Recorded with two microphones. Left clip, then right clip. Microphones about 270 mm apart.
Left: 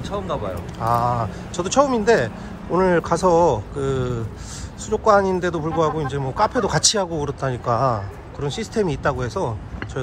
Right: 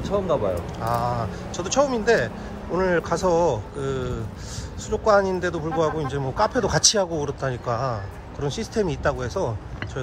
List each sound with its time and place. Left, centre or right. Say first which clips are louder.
0.0 s speech: right 3 dB; right
0.7 s speech: left 10 dB; centre